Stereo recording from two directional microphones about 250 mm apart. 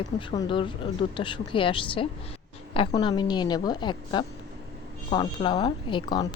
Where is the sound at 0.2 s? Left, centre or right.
Centre.